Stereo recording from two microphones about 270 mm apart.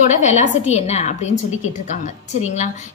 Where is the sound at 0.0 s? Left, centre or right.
Left.